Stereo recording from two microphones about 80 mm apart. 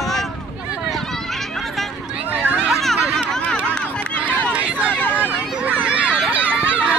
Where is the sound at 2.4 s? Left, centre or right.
Right.